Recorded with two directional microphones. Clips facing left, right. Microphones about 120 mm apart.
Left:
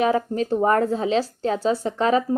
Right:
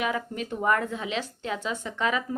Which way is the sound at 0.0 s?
35° left (ahead or behind).